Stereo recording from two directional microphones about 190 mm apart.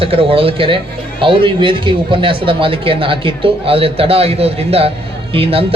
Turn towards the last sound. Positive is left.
turn(degrees=-30)  # may be behind; listen again after turning